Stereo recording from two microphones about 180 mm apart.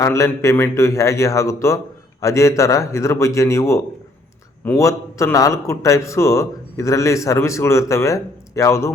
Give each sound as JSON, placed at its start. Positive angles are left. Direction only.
{"t": 0.0, "sound": "a man's voice", "side_deg": 15}